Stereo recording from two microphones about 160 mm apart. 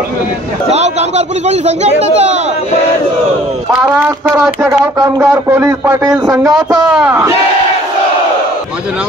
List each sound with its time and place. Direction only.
0.7 s speech: 45° right (ahead or behind)
4.6 s speech: 20° right (ahead or behind)